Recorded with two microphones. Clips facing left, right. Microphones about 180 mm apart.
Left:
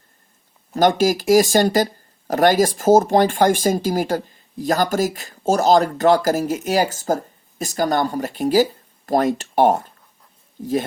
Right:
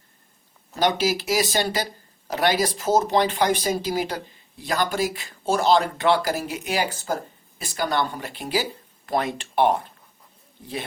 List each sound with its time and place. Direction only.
0.8 s speech: 45° left (ahead or behind)